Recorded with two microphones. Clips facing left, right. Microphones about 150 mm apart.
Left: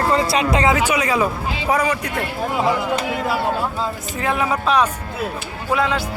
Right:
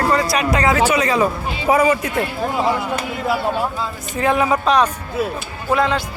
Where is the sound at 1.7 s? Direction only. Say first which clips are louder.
Right 5 dB; 5° right (ahead or behind).